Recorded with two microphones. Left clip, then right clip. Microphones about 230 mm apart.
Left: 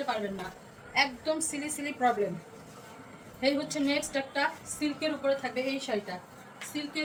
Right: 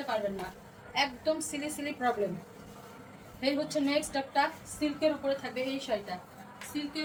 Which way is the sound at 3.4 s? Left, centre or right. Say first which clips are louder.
Left 1 dB; centre.